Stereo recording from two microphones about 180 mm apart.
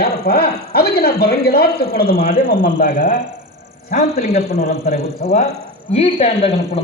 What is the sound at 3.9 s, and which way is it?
A man's voice, 40° left (ahead or behind).